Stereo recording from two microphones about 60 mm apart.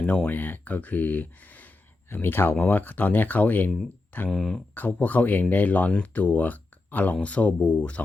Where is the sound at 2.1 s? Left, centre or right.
Left.